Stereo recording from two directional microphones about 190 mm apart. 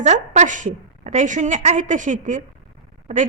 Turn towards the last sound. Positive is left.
turn(degrees=-35)  # may be behind; listen again after turning